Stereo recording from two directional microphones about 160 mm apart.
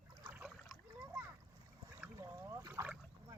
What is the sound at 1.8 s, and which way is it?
Boat, 15° right (ahead or behind).